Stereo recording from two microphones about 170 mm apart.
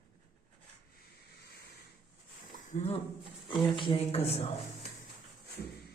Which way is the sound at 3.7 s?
30° left (ahead or behind).